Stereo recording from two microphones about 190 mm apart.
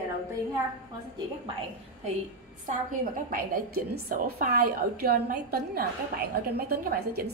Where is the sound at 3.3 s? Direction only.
50° right (ahead or behind).